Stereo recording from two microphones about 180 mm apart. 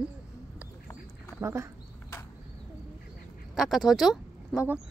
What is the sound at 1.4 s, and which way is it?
Speech, 15° right (ahead or behind).